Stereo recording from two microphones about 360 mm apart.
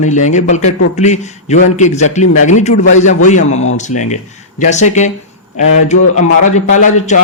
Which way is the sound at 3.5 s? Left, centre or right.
Left.